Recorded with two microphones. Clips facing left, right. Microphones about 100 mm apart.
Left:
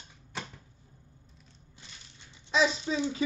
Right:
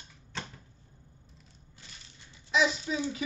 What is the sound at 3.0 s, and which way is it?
Speech, 30° left (ahead or behind).